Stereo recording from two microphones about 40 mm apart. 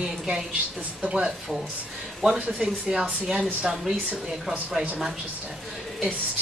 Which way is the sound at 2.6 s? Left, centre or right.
Centre.